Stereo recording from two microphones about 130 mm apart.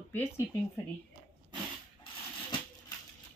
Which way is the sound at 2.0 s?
35° left (ahead or behind).